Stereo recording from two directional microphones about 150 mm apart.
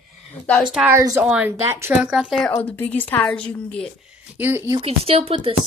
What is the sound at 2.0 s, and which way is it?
Speech, 5° right (ahead or behind).